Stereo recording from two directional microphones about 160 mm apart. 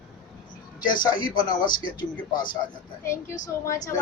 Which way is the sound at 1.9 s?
30° left (ahead or behind).